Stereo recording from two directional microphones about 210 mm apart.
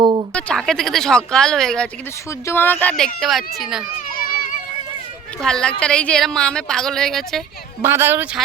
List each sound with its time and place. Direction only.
0.0 s a sound: 25° right (ahead or behind)
0.3 s speech: 5° left (ahead or behind)
5.4 s speech: 5° left (ahead or behind)
7.8 s speech: 10° right (ahead or behind)